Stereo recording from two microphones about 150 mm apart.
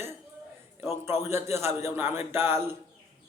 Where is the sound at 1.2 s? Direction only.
15° right (ahead or behind).